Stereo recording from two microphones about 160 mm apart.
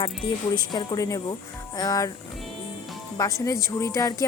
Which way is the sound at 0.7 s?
25° left (ahead or behind).